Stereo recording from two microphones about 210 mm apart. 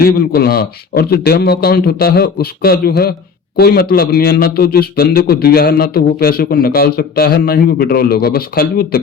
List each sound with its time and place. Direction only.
0.0 s a man's voice: 45° left (ahead or behind)